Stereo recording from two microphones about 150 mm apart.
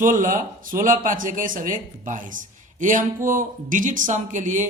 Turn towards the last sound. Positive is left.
turn(degrees=-55)  # may be behind; listen again after turning